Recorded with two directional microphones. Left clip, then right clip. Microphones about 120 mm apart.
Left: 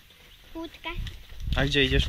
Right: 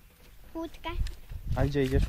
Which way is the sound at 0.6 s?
35° right (ahead or behind).